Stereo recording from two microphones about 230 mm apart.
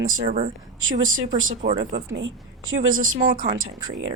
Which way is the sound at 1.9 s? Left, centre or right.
Right.